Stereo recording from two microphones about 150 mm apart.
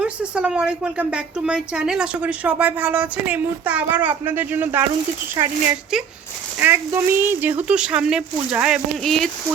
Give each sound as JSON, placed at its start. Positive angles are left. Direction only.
{"t": 0.0, "sound": "a woman's voice", "side_deg": -10}
{"t": 6.6, "sound": "a woman's voice", "side_deg": -15}